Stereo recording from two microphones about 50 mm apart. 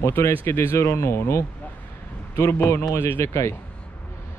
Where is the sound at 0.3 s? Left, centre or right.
Left.